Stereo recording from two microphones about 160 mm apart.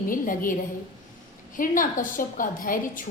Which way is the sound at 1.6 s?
55° left (ahead or behind).